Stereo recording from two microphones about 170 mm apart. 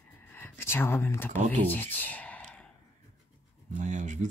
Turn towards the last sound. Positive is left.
turn(degrees=-45)  # may be behind; listen again after turning